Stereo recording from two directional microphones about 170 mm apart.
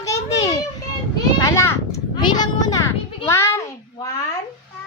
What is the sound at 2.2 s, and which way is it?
Children playing, 25° left (ahead or behind).